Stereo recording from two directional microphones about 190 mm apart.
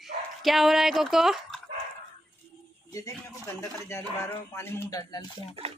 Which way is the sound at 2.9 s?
15° left (ahead or behind).